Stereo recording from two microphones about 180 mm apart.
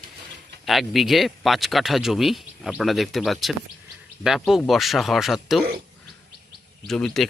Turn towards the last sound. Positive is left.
turn(degrees=0)  # may be behind; listen again after turning